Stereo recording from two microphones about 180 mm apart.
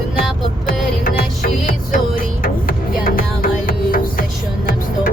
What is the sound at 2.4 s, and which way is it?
Music, 50° left (ahead or behind).